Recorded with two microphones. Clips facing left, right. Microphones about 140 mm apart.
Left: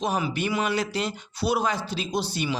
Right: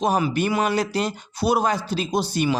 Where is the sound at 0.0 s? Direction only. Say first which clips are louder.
Right 5 dB; 45° right (ahead or behind).